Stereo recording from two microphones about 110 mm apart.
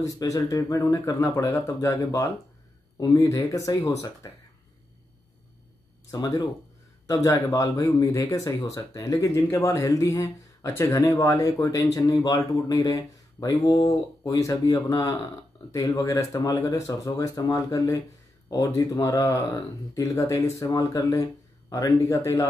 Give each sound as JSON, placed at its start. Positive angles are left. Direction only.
{"t": 0.0, "sound": "speech", "side_deg": 30}
{"t": 6.0, "sound": "speech", "side_deg": 35}